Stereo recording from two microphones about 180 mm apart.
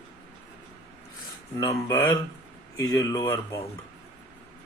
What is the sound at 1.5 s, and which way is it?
Speech, 15° left (ahead or behind).